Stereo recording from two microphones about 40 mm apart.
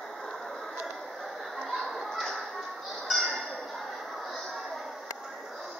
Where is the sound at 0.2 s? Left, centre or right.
Centre.